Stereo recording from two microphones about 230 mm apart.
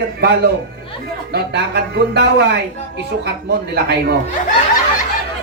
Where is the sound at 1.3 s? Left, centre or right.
Right.